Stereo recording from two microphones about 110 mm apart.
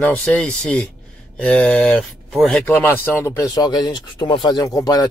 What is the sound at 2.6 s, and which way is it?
Speech, 20° left (ahead or behind).